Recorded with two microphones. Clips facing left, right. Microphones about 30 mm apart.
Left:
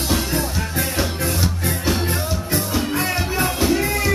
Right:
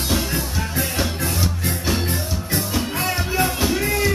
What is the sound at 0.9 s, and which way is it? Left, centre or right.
Music, centre.